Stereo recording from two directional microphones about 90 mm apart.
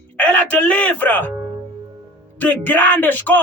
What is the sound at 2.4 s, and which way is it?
Speech, 20° left (ahead or behind).